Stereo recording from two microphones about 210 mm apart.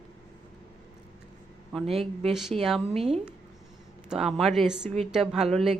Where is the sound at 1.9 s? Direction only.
30° right (ahead or behind).